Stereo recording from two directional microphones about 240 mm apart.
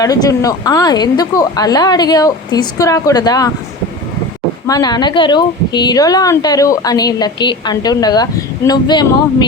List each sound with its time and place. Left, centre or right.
0.0 s a woman's voice: centre
4.6 s a woman's voice: centre